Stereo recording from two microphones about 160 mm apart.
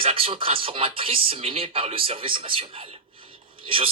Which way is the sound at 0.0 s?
35° right (ahead or behind).